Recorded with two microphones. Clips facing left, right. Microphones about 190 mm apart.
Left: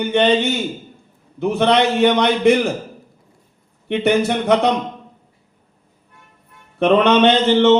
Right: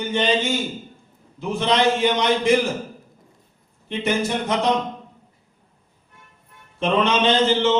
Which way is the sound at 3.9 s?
65° left (ahead or behind).